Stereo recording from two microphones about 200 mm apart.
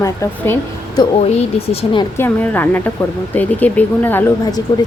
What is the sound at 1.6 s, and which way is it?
Speech, 25° left (ahead or behind).